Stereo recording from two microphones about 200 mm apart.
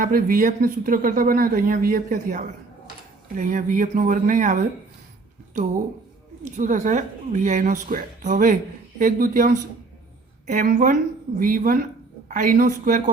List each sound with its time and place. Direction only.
0.0 s speech: 45° right (ahead or behind)
6.4 s a woman's voice: 35° right (ahead or behind)